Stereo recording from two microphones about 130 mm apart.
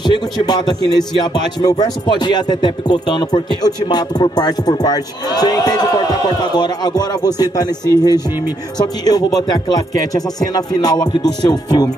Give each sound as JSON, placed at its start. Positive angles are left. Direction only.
{"t": 0.0, "sound": "music", "side_deg": 35}
{"t": 8.7, "sound": "speech", "side_deg": 30}
{"t": 11.1, "sound": "music", "side_deg": 30}